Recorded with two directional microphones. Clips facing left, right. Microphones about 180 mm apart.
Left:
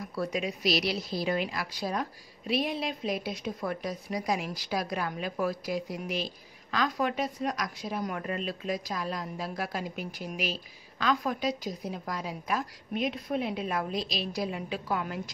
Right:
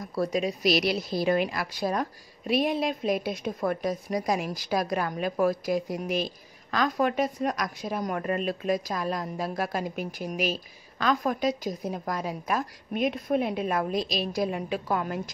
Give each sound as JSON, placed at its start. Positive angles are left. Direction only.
{"t": 0.0, "sound": "a woman's voice", "side_deg": -40}
{"t": 0.7, "sound": "a woman's voice", "side_deg": -55}